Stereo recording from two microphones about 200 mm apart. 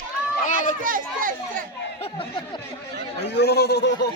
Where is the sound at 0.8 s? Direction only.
45° right (ahead or behind).